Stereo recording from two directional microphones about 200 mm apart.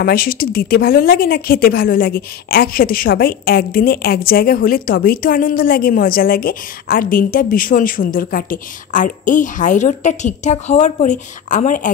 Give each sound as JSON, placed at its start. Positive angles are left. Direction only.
{"t": 0.0, "sound": "a woman's voice", "side_deg": 50}